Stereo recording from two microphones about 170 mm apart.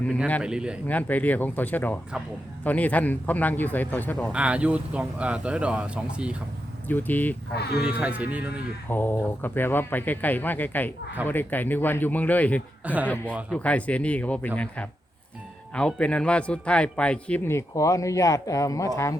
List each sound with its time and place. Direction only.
0.4 s speech: 5° right (ahead or behind)
0.9 s a man's voice: 10° left (ahead or behind)
4.3 s speech: 5° right (ahead or behind)
6.8 s a man's voice: 10° left (ahead or behind)
7.5 s speech: 70° left (ahead or behind)
7.9 s speech: 10° right (ahead or behind)
8.9 s a man's voice: 10° left (ahead or behind)
12.8 s a man's voice: 10° right (ahead or behind)
13.5 s a man's voice: 10° left (ahead or behind)